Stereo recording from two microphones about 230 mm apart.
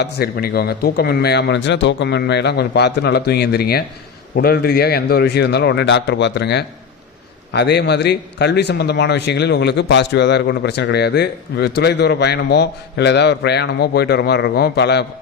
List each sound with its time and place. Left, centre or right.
0.0 s a man's voice: left